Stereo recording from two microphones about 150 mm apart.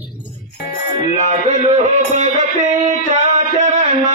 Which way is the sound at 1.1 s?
50° right (ahead or behind).